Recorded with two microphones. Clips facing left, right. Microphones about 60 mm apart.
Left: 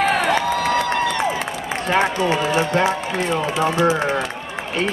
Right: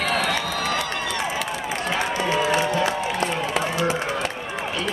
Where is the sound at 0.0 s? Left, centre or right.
Left.